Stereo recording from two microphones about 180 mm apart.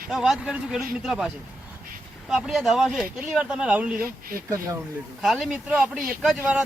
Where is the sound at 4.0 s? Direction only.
55° right (ahead or behind).